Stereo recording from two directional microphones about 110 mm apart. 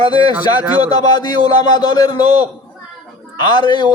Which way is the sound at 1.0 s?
40° left (ahead or behind).